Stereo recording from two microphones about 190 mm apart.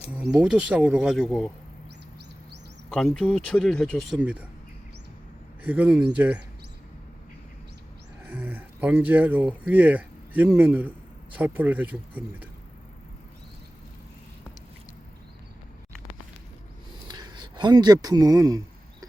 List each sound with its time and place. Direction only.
0.1 s speech: 5° right (ahead or behind)
2.9 s speech: 5° left (ahead or behind)
5.6 s speech: 10° right (ahead or behind)
8.2 s speech: 10° right (ahead or behind)
17.1 s a sound: 20° right (ahead or behind)